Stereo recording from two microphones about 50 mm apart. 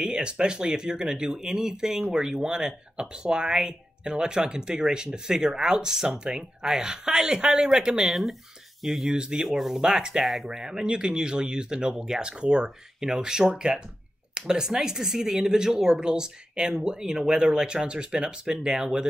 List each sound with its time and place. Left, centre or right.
0.0 s speech: centre
8.1 s speech: centre
9.1 s speech: centre
9.5 s speech: centre
10.2 s speech: centre